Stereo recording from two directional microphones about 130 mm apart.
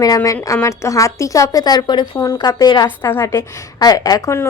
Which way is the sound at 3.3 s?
30° left (ahead or behind).